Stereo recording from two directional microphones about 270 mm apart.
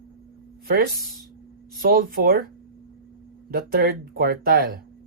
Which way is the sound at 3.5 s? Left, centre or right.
Right.